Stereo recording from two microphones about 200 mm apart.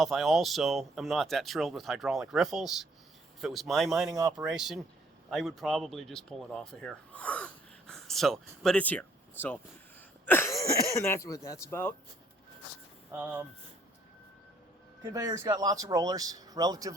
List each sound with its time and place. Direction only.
0.0 s speech: centre (ahead or behind)
4.1 s speech: 20° right (ahead or behind)
4.4 s speech: centre (ahead or behind)
13.1 s speech: 10° right (ahead or behind)
15.1 s speech: 15° right (ahead or behind)